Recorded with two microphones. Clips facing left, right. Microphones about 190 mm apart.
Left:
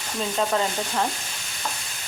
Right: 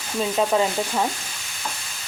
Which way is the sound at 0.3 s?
10° right (ahead or behind).